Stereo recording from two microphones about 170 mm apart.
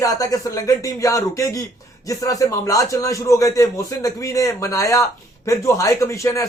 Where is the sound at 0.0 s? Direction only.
20° left (ahead or behind).